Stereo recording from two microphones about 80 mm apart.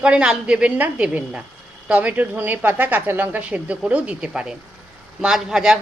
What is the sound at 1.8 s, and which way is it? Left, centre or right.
A woman's voice, centre.